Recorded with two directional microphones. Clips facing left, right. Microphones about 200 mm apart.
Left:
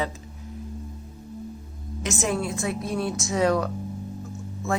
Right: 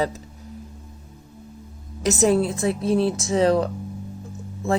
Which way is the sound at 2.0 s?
35° right (ahead or behind).